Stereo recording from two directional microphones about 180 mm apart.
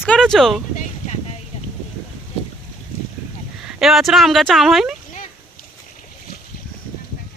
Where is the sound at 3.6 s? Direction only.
Centre (ahead or behind).